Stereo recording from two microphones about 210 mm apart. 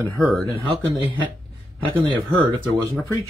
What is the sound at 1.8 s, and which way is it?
Speech, 25° right (ahead or behind).